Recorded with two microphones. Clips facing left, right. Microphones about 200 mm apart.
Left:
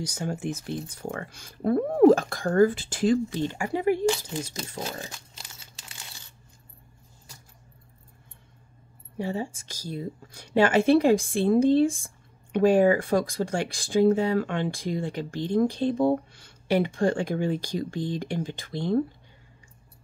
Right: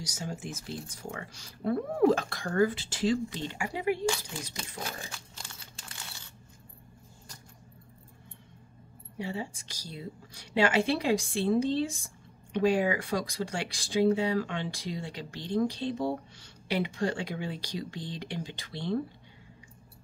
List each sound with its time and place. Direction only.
0.0 s speech: 60° left (ahead or behind)
9.2 s speech: 45° left (ahead or behind)